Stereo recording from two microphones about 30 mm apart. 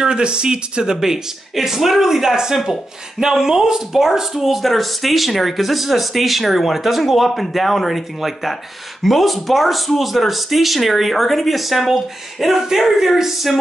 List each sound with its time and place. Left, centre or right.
0.0 s speech: right
0.9 s speech: centre